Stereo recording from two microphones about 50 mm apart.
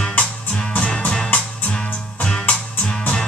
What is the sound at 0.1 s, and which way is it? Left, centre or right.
Music, left.